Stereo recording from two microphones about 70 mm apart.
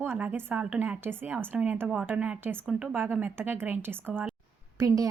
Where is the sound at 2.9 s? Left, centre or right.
Right.